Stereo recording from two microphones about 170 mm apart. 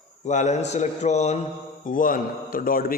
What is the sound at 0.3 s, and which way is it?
A man's voice, 45° left (ahead or behind).